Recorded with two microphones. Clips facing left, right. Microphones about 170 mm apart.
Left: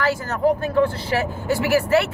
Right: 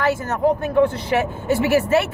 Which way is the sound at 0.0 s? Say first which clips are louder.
Right 1 dB; 20° right (ahead or behind).